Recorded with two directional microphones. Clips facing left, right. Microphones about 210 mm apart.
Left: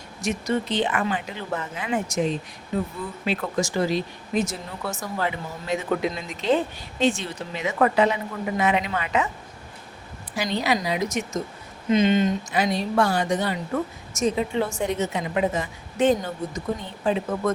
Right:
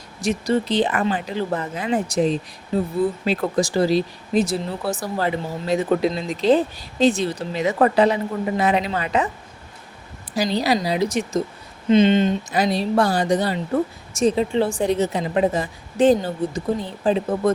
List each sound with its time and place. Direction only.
0.2 s speech: 35° right (ahead or behind)
10.3 s speech: 35° right (ahead or behind)